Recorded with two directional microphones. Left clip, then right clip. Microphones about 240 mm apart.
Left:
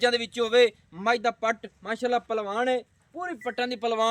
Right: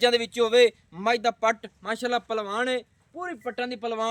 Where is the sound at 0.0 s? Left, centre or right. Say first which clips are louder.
Right 3 dB; centre.